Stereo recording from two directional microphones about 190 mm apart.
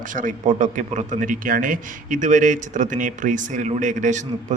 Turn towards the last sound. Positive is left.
turn(degrees=-40)  # may be behind; listen again after turning